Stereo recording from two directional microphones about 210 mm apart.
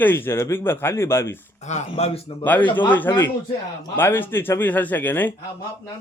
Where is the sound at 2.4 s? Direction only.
10° left (ahead or behind).